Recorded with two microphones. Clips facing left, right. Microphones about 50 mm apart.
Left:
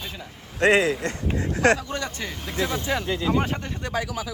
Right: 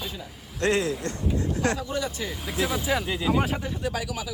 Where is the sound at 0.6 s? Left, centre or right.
Left.